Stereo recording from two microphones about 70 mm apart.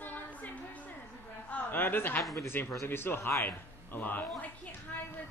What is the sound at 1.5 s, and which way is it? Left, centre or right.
A man's voice, left.